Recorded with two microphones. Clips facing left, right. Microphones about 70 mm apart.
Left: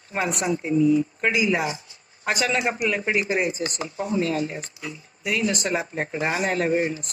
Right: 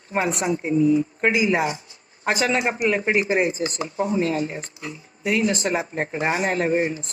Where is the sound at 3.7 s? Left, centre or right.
Right.